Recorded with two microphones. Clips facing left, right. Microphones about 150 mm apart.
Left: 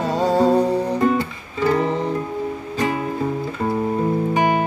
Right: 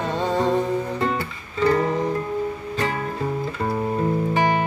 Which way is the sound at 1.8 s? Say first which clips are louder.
Left 1 dB; 30° left (ahead or behind).